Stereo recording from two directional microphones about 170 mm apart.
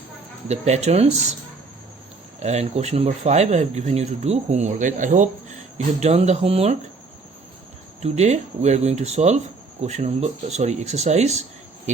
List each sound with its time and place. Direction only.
0.4 s speech: 40° right (ahead or behind)
2.4 s speech: 40° right (ahead or behind)
8.0 s speech: 40° right (ahead or behind)